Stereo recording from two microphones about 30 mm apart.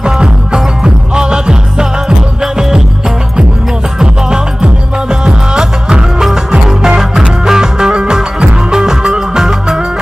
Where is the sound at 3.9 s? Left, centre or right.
Right.